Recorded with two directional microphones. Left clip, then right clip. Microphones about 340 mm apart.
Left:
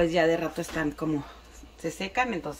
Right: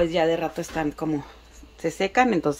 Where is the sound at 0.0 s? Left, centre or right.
Centre.